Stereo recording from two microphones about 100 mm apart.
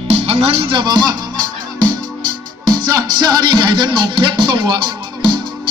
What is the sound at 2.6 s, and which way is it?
Music, 40° right (ahead or behind).